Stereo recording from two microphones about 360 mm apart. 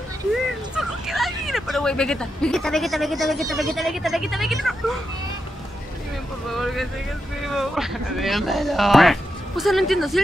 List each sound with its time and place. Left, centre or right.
0.3 s speech: centre
6.5 s speech: centre